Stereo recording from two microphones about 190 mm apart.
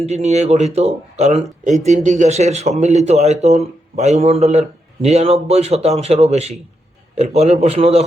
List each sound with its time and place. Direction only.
0.0 s a man's voice: 35° right (ahead or behind)